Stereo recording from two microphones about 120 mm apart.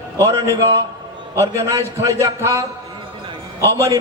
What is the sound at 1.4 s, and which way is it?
A man's voice, 25° right (ahead or behind).